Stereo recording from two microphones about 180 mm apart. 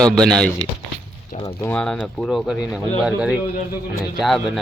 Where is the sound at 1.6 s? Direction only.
5° left (ahead or behind).